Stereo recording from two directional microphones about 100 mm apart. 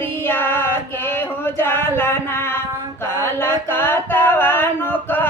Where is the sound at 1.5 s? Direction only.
25° left (ahead or behind).